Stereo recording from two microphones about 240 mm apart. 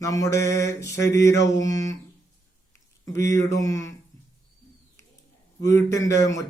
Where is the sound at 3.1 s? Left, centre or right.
Centre.